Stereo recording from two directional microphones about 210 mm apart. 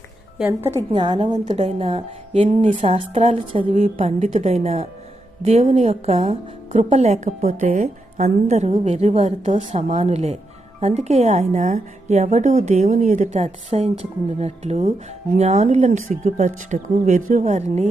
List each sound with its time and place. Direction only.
0.3 s a woman's voice: 10° right (ahead or behind)
0.9 s a woman's voice: 20° right (ahead or behind)